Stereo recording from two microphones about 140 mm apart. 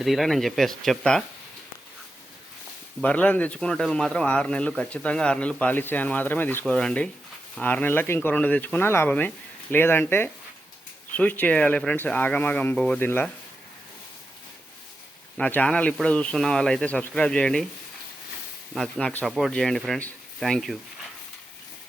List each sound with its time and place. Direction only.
0.0 s speech: centre (ahead or behind)
3.0 s speech: 10° left (ahead or behind)
15.4 s speech: 10° left (ahead or behind)
18.7 s speech: 5° left (ahead or behind)